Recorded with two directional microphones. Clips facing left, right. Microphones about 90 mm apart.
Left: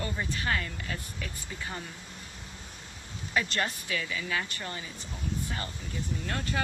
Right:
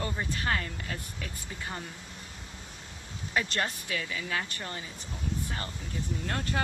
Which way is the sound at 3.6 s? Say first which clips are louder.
Left 1 dB; 35° right (ahead or behind).